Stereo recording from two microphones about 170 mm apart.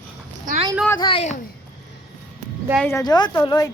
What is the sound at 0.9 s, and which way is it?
Speech, 30° left (ahead or behind).